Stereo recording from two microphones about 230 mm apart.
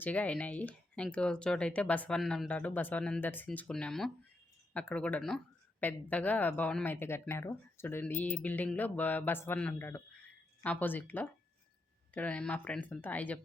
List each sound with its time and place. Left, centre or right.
0.0 s speech: centre